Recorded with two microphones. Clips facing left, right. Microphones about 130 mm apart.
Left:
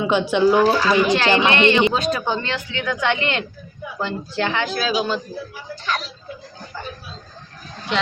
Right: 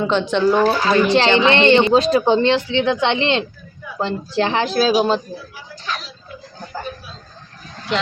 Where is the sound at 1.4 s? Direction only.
30° right (ahead or behind).